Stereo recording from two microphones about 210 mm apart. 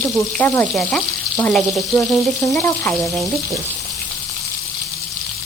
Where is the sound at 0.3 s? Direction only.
5° left (ahead or behind).